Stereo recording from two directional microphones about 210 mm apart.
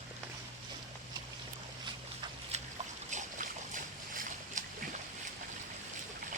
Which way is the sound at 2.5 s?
30° right (ahead or behind).